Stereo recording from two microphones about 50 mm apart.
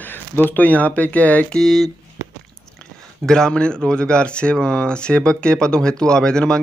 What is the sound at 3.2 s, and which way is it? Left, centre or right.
Speech, centre.